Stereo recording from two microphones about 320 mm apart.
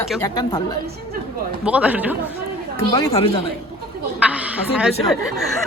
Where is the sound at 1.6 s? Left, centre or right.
Centre.